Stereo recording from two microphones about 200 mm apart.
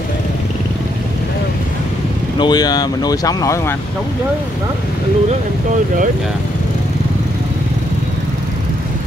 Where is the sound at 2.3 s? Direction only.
20° left (ahead or behind).